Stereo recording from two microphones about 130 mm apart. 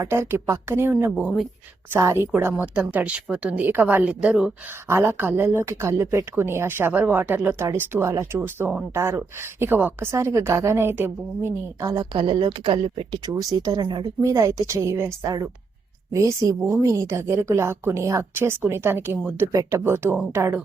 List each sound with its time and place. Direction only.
0.0 s speech: 20° right (ahead or behind)
1.1 s speech: centre (ahead or behind)
1.9 s speech: 20° right (ahead or behind)
12.1 s speech: 40° right (ahead or behind); by 20.6 s 15° right (ahead or behind)